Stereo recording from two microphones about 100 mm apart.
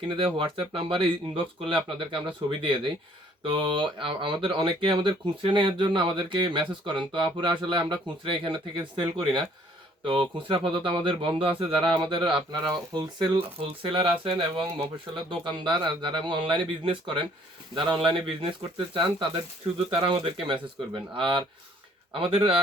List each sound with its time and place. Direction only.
0.1 s speech: 60° right (ahead or behind)